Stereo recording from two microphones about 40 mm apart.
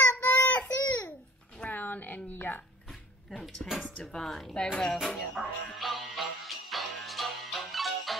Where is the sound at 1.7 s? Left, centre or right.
Left.